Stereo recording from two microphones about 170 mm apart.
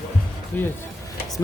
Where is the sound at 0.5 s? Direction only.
10° left (ahead or behind).